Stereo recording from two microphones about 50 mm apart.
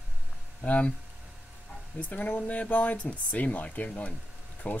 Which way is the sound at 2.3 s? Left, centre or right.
Left.